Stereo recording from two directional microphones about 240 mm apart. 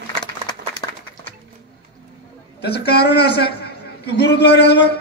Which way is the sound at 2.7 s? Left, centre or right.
Left.